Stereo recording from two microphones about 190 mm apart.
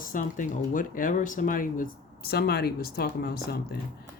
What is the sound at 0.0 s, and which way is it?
Speech, 45° left (ahead or behind).